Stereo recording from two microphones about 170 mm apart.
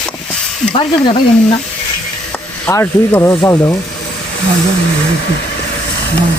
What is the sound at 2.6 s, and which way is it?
Speech, 10° left (ahead or behind).